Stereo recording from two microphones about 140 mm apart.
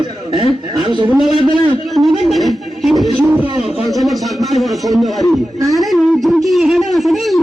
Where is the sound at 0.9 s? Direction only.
30° right (ahead or behind).